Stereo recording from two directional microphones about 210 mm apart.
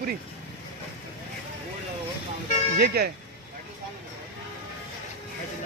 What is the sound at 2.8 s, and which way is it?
Speech, 50° right (ahead or behind).